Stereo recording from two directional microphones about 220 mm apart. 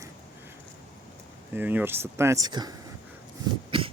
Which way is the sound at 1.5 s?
10° right (ahead or behind).